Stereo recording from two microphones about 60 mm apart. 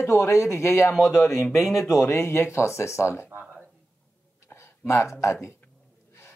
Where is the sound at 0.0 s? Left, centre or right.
Left.